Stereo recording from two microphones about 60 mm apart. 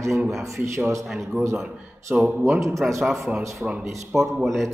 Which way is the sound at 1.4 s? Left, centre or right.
Right.